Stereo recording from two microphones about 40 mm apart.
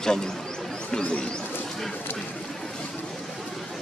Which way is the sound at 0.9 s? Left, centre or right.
Left.